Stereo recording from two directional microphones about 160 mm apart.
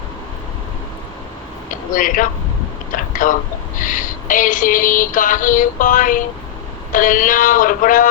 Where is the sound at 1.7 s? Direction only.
55° left (ahead or behind).